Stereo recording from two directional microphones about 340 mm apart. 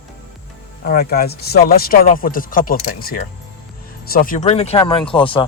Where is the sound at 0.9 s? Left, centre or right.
Left.